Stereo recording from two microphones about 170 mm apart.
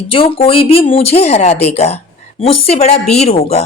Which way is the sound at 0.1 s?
30° left (ahead or behind).